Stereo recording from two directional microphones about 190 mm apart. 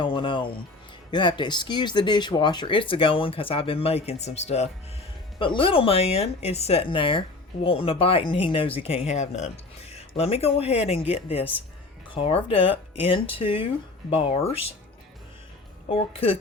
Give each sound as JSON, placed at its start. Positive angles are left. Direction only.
{"t": 0.0, "sound": "music", "side_deg": 25}
{"t": 1.1, "sound": "speech", "side_deg": 25}
{"t": 15.9, "sound": "speech", "side_deg": 30}